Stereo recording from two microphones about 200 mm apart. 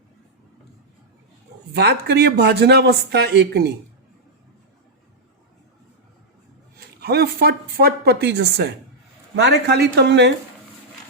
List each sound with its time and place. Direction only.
1.7 s speech: 55° right (ahead or behind)
6.7 s speech: 55° right (ahead or behind)